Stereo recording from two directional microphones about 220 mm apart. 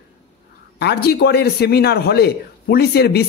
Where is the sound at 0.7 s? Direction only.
45° left (ahead or behind).